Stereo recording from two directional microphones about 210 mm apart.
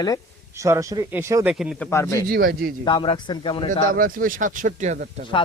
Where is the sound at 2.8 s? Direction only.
25° left (ahead or behind).